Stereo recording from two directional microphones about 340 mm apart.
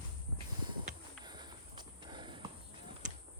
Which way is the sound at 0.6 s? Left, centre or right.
Centre.